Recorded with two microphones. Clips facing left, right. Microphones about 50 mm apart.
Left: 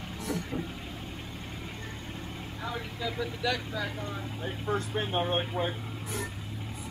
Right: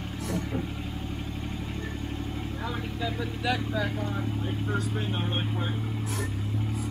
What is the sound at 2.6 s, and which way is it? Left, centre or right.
Speech, centre.